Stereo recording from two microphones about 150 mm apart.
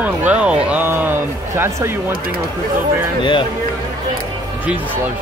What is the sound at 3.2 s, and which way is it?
Speech, 30° left (ahead or behind).